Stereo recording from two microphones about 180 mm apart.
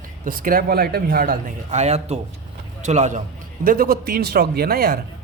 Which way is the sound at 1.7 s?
40° right (ahead or behind).